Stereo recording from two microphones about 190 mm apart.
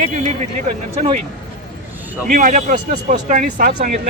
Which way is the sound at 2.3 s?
45° right (ahead or behind).